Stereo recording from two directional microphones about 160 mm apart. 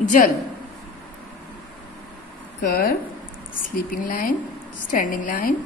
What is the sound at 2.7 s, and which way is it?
Speech, 70° left (ahead or behind).